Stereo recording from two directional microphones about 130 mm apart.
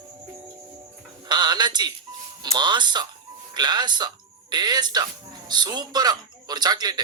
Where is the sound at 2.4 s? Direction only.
35° right (ahead or behind).